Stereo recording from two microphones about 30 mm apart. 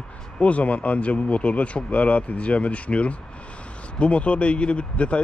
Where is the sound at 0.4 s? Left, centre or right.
Left.